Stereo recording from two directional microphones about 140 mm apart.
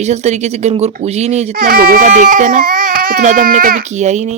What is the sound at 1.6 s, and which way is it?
Speech, 90° right.